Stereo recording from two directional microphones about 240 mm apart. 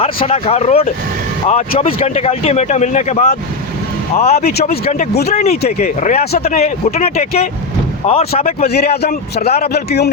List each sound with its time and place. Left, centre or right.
0.0 s speech: left
4.4 s a man's voice: left
8.6 s a man's voice: left